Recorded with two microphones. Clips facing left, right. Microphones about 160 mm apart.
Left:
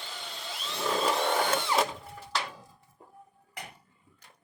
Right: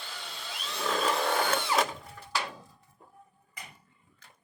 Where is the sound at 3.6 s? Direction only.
70° left (ahead or behind).